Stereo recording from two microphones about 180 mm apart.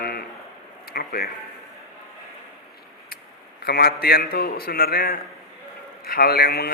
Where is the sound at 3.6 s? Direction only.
55° left (ahead or behind).